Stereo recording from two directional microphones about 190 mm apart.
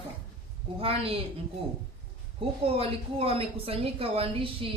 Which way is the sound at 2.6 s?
30° right (ahead or behind).